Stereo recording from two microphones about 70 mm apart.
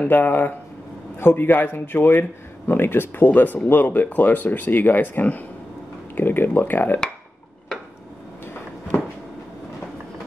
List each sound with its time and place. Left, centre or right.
0.0 s a man's voice: left